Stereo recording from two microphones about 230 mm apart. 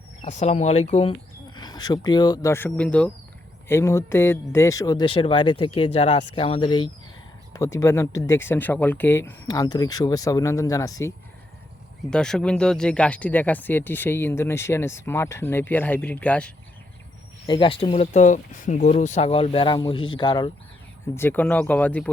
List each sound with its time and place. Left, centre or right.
0.2 s speech: left
1.5 s speech: centre
12.1 s speech: centre
17.4 s speech: left
21.2 s speech: centre